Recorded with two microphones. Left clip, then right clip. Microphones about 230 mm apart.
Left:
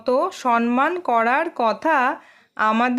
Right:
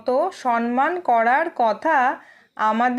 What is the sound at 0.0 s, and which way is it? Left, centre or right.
Speech, left.